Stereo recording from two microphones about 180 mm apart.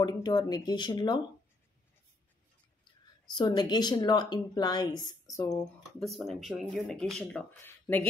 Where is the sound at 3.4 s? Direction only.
25° left (ahead or behind).